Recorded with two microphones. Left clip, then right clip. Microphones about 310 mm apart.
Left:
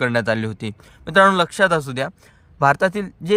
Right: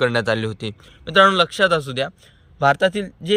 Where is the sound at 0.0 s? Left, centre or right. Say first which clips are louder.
Right 1 dB; centre.